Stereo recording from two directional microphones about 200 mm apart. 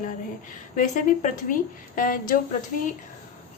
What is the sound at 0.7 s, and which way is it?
Speech, 40° left (ahead or behind).